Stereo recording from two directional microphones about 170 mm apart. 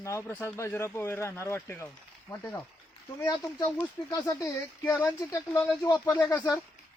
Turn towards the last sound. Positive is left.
turn(degrees=10)  # may be behind; listen again after turning